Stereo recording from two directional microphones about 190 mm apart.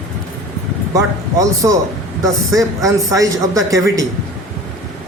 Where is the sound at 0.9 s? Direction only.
15° right (ahead or behind).